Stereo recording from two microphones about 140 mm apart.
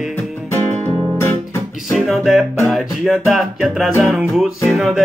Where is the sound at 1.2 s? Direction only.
20° left (ahead or behind).